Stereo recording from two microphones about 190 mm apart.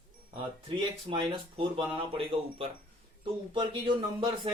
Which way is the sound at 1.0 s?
25° right (ahead or behind).